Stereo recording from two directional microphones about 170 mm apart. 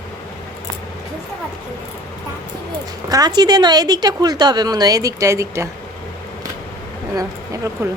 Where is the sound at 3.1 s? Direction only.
25° right (ahead or behind).